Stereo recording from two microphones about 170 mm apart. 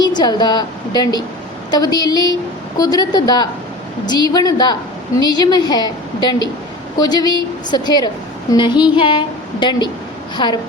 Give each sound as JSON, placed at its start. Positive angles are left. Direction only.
{"t": 0.2, "sound": "a woman's voice", "side_deg": 25}
{"t": 7.0, "sound": "a woman's voice", "side_deg": 25}